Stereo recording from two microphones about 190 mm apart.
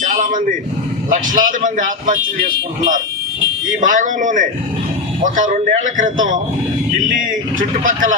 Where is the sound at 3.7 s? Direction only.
45° right (ahead or behind).